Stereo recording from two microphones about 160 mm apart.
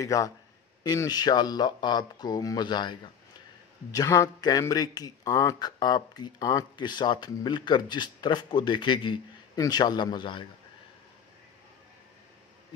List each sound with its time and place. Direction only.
0.0 s speech: 20° left (ahead or behind)